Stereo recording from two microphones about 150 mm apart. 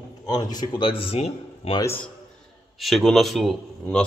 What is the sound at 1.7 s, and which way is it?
Speech, 20° left (ahead or behind).